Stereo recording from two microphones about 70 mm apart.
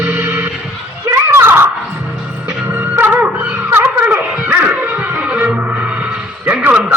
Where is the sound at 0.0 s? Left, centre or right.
Right.